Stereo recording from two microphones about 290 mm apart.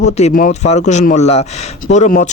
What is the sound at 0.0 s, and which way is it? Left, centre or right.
Speech, left.